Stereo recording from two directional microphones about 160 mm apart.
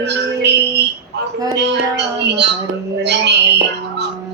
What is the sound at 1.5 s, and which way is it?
A woman's voice, 90° right.